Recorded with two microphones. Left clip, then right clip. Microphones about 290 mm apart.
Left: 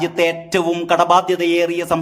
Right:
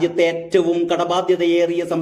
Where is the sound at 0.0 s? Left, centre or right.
Left.